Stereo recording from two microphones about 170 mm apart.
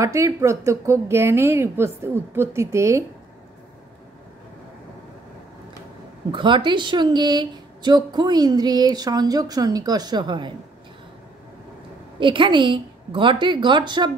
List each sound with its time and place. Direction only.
0.0 s a woman's voice: 20° right (ahead or behind)
6.3 s speech: 30° right (ahead or behind)
12.2 s speech: 30° right (ahead or behind)